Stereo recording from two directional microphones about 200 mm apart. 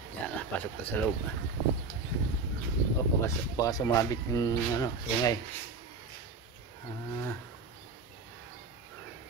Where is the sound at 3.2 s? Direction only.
15° left (ahead or behind).